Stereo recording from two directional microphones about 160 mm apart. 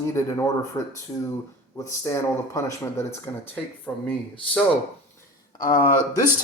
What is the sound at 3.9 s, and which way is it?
Speech, 5° left (ahead or behind).